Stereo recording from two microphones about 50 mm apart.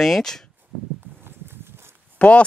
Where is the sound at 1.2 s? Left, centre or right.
Right.